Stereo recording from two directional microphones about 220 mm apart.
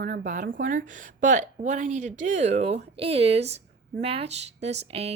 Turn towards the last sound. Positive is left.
turn(degrees=-30)  # may be behind; listen again after turning